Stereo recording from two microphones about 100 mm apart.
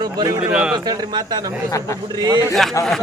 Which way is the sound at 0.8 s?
45° right (ahead or behind).